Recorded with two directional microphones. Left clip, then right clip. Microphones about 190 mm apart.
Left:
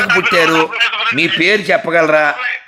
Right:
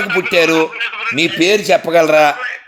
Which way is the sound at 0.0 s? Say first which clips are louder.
Left 4 dB; 50° left (ahead or behind).